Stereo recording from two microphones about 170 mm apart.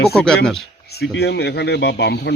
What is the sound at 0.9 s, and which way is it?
A man's voice, 85° left.